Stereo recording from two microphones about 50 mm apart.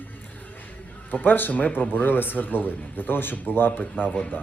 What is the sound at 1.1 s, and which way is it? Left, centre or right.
Speech, left.